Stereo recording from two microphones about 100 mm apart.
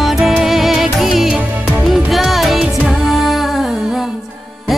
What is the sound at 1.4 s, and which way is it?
Music, 15° right (ahead or behind).